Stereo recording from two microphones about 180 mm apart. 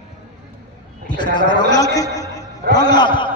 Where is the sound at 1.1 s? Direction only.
25° left (ahead or behind).